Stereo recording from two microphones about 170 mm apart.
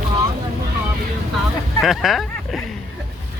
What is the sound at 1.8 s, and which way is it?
Speech, centre (ahead or behind).